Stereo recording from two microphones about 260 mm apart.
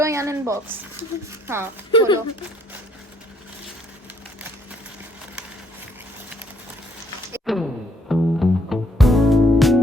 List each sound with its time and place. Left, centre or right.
0.0 s speech: centre
1.9 s speech: centre
7.4 s music: centre